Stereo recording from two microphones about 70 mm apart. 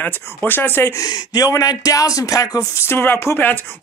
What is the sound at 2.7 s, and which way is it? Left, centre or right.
Speech, left.